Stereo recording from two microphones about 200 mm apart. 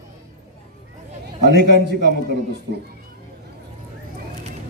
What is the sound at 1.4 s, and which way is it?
A man's voice, 55° right (ahead or behind).